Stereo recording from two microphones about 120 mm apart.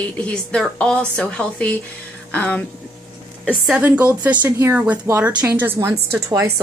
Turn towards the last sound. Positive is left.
turn(degrees=-25)  # may be behind; listen again after turning